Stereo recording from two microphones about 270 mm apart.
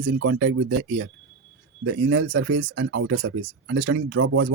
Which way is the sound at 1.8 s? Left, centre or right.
Right.